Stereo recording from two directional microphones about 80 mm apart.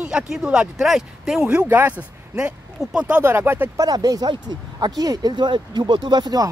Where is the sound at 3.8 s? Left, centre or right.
Right.